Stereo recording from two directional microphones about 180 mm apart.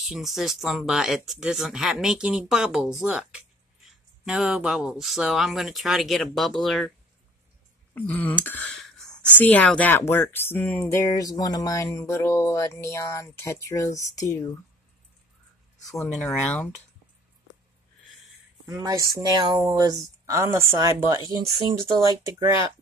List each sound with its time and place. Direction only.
0.0 s speech: centre (ahead or behind)
7.9 s speech: 10° left (ahead or behind)
15.9 s speech: centre (ahead or behind)
18.7 s a woman's voice: 20° right (ahead or behind)